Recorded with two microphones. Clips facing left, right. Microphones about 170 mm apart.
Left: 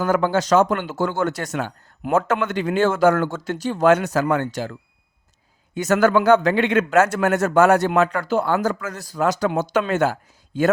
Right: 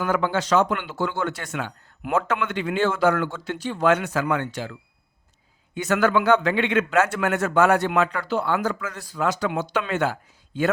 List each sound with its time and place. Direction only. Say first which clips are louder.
0.0 s a man's voice: left 4 dB; 40° left (ahead or behind)